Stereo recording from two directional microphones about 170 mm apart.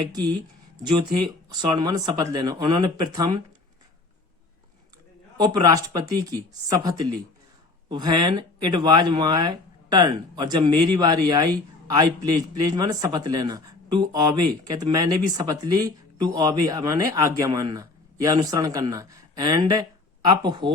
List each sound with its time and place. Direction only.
0.8 s speech: 25° right (ahead or behind)
5.4 s speech: 25° right (ahead or behind)